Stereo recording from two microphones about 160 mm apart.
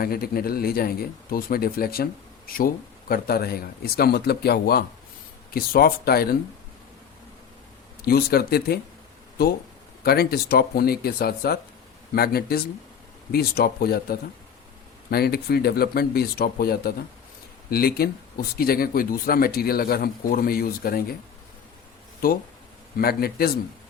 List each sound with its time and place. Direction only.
0.0 s speech: 70° left (ahead or behind)
5.5 s speech: 70° left (ahead or behind)
8.0 s speech: 75° left (ahead or behind)
10.0 s speech: 75° left (ahead or behind)
23.0 s speech: 75° left (ahead or behind)